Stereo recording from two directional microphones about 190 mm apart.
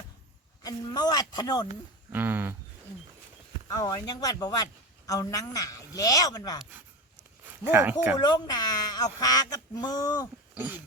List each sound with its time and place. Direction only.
0.6 s a man's voice: 20° left (ahead or behind)
2.1 s speech: 10° right (ahead or behind)
3.7 s a man's voice: 20° left (ahead or behind)
7.7 s speech: 10° right (ahead or behind)
8.2 s a man's voice: 20° left (ahead or behind)
10.5 s speech: 10° right (ahead or behind)